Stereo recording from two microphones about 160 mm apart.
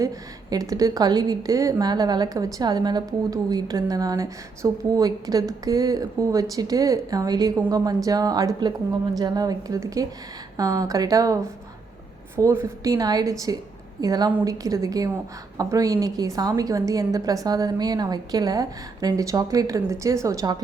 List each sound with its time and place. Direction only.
0.5 s a woman's voice: 20° right (ahead or behind)
12.4 s a woman's voice: 15° right (ahead or behind)